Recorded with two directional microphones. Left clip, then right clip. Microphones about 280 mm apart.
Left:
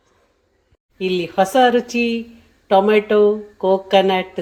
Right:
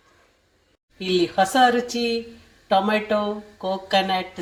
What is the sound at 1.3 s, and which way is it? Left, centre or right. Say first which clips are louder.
A woman's voice: left 5 dB; left.